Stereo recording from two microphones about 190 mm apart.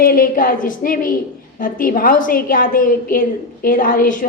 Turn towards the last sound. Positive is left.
turn(degrees=45)  # may be behind; listen again after turning